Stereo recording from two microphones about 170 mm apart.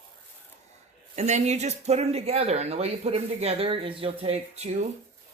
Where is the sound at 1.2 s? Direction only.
45° right (ahead or behind).